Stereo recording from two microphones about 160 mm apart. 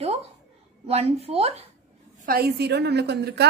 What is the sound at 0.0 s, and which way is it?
A woman's voice, 40° right (ahead or behind).